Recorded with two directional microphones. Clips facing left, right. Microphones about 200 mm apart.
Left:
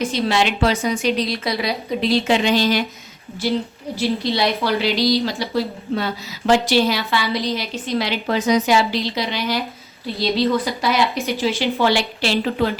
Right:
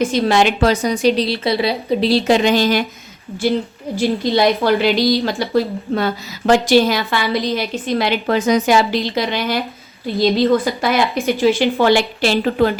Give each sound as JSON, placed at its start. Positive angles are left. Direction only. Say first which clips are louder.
{"t": 0.0, "sound": "a woman's voice", "louder": "right 5 dB", "side_deg": -50}
{"t": 3.9, "sound": "a woman's voice", "louder": "right 4 dB", "side_deg": -50}